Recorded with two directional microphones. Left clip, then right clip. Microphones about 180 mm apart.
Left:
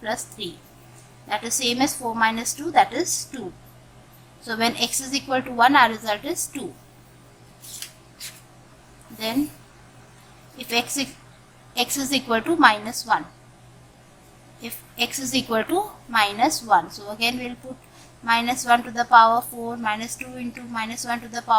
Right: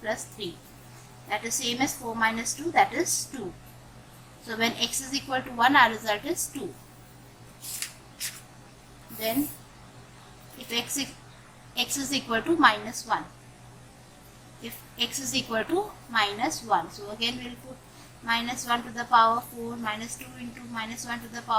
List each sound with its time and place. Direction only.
0.0 s a woman's voice: 40° left (ahead or behind)
4.4 s a woman's voice: 35° left (ahead or behind)
10.7 s a woman's voice: 35° left (ahead or behind)
14.6 s a woman's voice: 35° left (ahead or behind)